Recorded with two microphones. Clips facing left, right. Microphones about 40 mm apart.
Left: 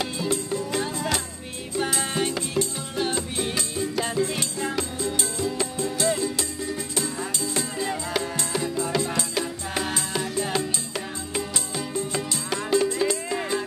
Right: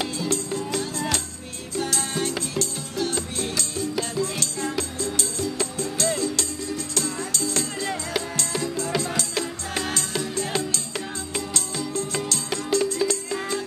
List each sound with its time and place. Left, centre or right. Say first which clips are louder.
0.2 s music: even; centre